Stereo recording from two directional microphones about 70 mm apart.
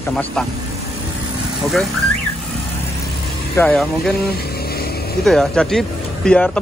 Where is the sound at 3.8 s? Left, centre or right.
Centre.